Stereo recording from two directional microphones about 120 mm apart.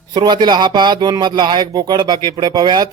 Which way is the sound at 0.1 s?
40° right (ahead or behind).